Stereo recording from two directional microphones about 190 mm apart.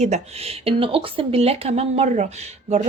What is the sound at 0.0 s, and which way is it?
Speech, 35° right (ahead or behind).